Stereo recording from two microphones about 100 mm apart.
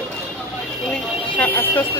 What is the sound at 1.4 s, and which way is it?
Speech, 20° left (ahead or behind).